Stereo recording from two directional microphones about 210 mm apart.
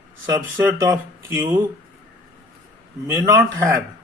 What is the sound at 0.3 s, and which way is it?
Speech, 15° right (ahead or behind).